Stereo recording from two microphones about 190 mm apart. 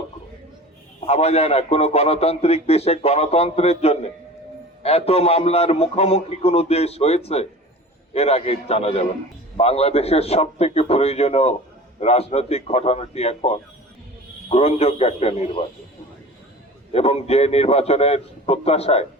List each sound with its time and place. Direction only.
1.0 s a man's voice: 35° left (ahead or behind)
16.9 s a man's voice: 30° left (ahead or behind)